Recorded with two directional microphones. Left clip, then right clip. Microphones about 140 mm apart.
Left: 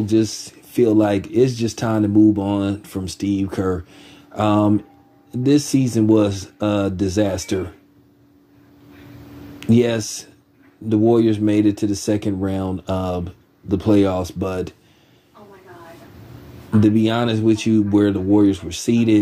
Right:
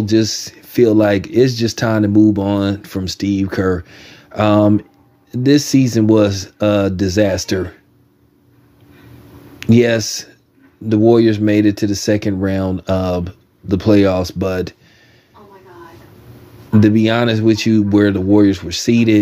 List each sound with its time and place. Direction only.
0.0 s speech: 45° right (ahead or behind)
9.6 s speech: 45° right (ahead or behind)
16.8 s speech: 45° right (ahead or behind)